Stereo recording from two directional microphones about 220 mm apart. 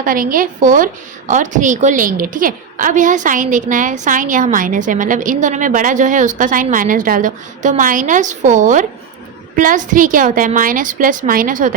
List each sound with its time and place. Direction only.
0.0 s a woman's voice: 40° right (ahead or behind)